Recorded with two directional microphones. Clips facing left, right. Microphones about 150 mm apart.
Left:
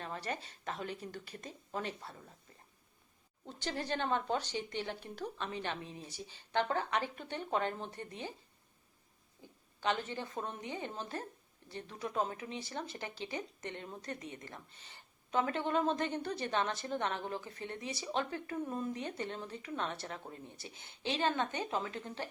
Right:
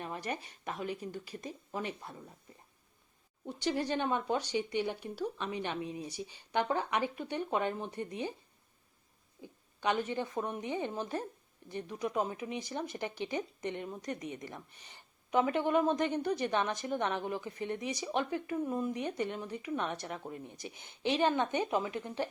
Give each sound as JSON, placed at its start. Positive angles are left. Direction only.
{"t": 0.0, "sound": "speech", "side_deg": -15}
{"t": 3.4, "sound": "speech", "side_deg": -15}
{"t": 9.4, "sound": "speech", "side_deg": -15}